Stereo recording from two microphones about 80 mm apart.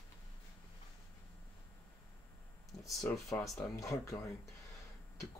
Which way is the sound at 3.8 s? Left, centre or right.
Left.